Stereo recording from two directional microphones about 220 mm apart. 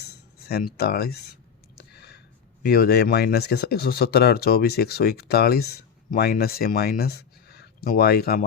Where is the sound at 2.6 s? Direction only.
45° left (ahead or behind).